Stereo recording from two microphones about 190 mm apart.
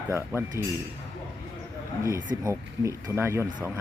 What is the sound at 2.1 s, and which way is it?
Speech, 15° right (ahead or behind).